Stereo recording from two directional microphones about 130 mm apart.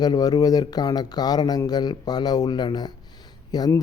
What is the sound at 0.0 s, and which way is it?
Speech, 30° left (ahead or behind).